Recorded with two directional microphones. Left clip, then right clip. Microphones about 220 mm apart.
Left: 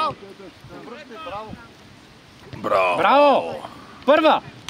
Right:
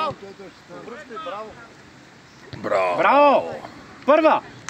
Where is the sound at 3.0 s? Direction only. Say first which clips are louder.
Right 1 dB; 45° left (ahead or behind).